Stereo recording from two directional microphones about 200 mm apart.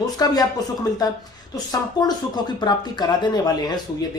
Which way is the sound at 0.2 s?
15° left (ahead or behind).